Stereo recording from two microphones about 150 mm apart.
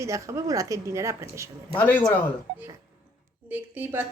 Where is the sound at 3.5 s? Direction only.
10° right (ahead or behind).